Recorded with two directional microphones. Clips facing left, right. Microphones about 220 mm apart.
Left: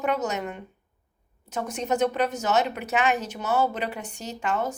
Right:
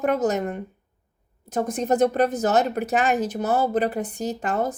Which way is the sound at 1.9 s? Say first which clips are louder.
Right 4 dB; 40° right (ahead or behind).